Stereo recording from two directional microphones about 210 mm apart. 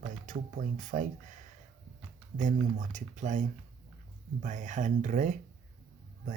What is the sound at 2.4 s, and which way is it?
Speech, 35° right (ahead or behind).